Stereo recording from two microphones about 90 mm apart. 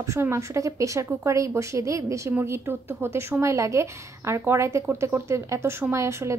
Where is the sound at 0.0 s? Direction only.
35° right (ahead or behind).